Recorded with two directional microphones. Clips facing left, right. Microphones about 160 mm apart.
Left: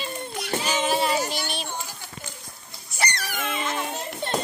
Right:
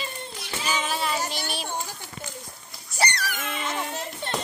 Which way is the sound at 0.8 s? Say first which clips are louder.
Left 6 dB; 25° left (ahead or behind).